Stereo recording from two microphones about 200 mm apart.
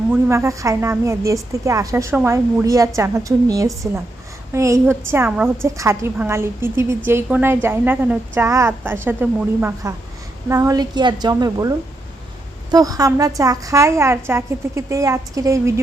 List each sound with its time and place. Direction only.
0.1 s a woman's voice: 15° right (ahead or behind)
12.7 s a woman's voice: 15° right (ahead or behind)